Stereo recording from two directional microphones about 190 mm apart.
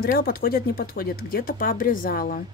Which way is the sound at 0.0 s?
50° left (ahead or behind).